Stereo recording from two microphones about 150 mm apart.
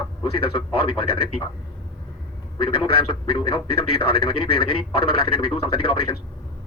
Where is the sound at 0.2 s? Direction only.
35° left (ahead or behind).